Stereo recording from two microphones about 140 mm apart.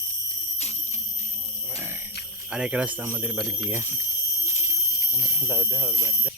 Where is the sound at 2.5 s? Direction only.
5° right (ahead or behind).